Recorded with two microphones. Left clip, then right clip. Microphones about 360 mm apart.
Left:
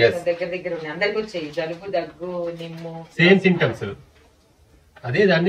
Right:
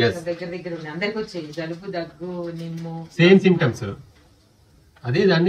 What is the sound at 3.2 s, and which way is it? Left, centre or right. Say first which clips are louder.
Speech: even; centre.